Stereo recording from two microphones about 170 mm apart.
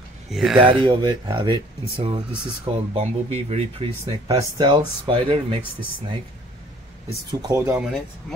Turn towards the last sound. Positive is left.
turn(degrees=-20)  # may be behind; listen again after turning